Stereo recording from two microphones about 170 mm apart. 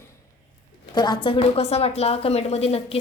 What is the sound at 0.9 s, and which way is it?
A woman's voice, 25° left (ahead or behind).